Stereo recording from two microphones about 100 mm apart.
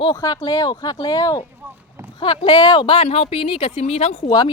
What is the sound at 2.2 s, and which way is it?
Speech, 60° left (ahead or behind).